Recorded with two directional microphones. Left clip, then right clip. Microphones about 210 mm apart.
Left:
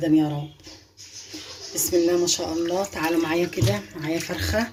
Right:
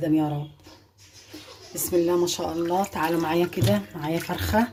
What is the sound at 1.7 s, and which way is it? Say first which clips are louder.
Speech: left 2 dB; 40° right (ahead or behind).